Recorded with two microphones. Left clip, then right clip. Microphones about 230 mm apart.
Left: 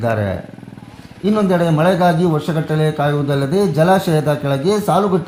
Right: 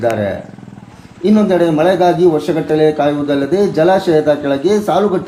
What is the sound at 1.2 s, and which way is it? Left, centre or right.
Speech, left.